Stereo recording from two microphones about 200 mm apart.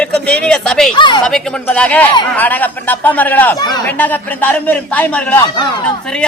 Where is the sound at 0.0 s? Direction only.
5° left (ahead or behind).